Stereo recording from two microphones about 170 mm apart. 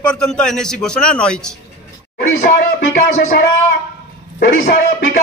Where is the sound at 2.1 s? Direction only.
60° left (ahead or behind).